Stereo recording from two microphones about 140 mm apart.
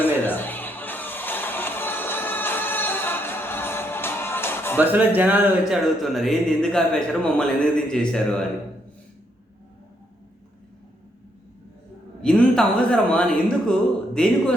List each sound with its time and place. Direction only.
0.0 s music: 15° left (ahead or behind)
4.8 s speech: 10° right (ahead or behind); by 8.4 s 5° left (ahead or behind)
12.2 s speech: 5° left (ahead or behind)